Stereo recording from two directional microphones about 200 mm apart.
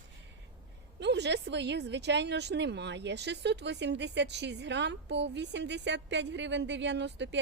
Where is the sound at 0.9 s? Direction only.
60° right (ahead or behind).